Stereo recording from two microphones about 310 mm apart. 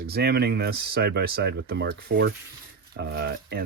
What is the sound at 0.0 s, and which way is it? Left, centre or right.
Speech, right.